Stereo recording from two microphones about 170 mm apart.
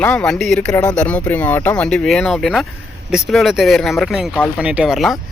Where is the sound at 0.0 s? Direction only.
5° left (ahead or behind).